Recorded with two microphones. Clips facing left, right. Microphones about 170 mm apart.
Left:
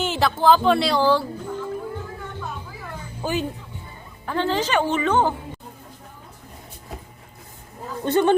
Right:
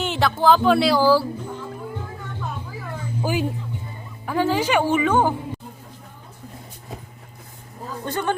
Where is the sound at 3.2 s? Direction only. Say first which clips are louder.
Right 1 dB; 10° right (ahead or behind).